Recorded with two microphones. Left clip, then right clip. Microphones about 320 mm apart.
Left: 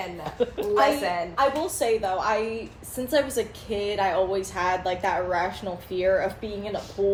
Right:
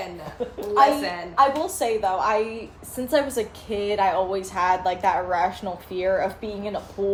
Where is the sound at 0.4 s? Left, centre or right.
Left.